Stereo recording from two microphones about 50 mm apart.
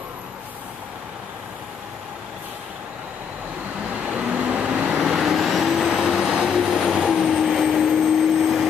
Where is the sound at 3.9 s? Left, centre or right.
Centre.